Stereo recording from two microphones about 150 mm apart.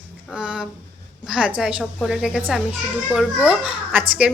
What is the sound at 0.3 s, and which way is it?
A woman's voice, 5° right (ahead or behind).